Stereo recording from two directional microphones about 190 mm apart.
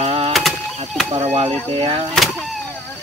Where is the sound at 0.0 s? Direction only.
35° right (ahead or behind).